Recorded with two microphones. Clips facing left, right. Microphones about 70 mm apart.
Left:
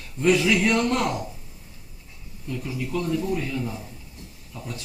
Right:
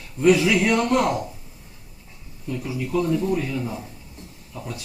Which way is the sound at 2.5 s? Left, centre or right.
Centre.